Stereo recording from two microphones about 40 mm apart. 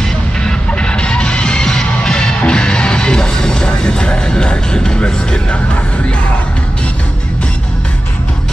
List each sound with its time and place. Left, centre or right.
0.4 s music: left